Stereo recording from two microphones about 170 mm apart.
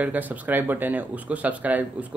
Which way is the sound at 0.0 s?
10° right (ahead or behind).